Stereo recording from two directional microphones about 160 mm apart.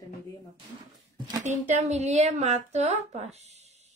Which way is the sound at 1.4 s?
45° right (ahead or behind).